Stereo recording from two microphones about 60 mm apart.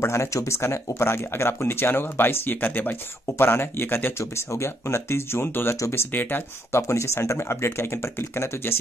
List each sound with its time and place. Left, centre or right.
0.0 s speech: left
0.8 s speech: left
6.7 s speech: left